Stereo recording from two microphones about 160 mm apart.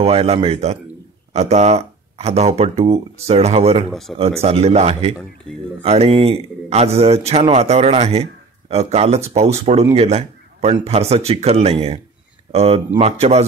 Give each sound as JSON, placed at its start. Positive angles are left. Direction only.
{"t": 0.0, "sound": "a man's voice", "side_deg": -40}
{"t": 3.9, "sound": "speech", "side_deg": 0}
{"t": 4.4, "sound": "a man's voice", "side_deg": -40}